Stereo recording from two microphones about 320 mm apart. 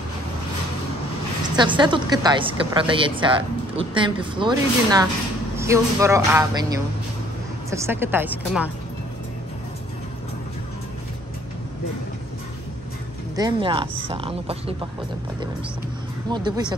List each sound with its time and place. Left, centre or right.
1.4 s a woman's voice: centre
7.7 s a woman's voice: centre
13.4 s a woman's voice: centre
16.3 s a woman's voice: centre